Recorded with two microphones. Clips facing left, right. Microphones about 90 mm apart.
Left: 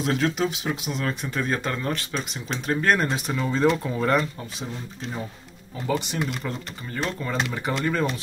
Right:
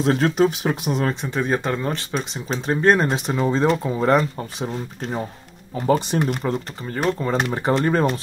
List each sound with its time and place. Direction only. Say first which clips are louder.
0.0 s speech: right 5 dB; 30° right (ahead or behind)
0.4 s speech: right 7 dB; 45° right (ahead or behind)
1.0 s speech: right 1 dB; 25° right (ahead or behind)
4.6 s speech: right 8 dB; 50° right (ahead or behind)